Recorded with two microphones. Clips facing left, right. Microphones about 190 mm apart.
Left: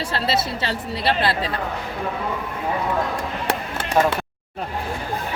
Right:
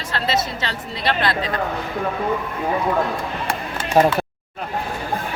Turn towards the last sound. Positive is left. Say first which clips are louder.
# right 3 dB
turn(degrees=-35)  # may be behind; listen again after turning